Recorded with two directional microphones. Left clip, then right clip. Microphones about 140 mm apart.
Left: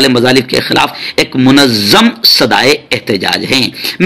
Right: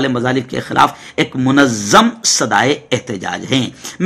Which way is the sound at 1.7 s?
30° left (ahead or behind).